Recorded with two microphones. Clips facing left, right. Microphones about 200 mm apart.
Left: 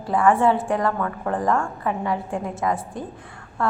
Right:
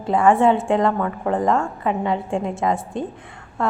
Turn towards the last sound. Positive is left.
turn(degrees=-20)  # may be behind; listen again after turning